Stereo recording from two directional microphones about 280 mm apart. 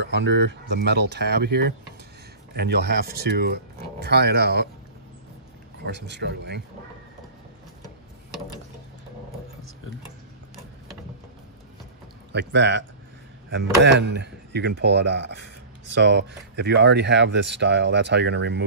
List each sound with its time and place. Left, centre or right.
0.0 s speech: right
5.9 s speech: right
12.3 s speech: right